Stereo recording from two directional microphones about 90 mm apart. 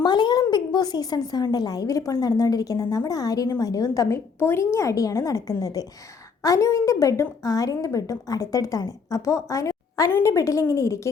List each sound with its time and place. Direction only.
0.0 s a sound: 55° left (ahead or behind)
0.5 s a woman's voice: 50° left (ahead or behind)
4.4 s a woman's voice: 30° left (ahead or behind)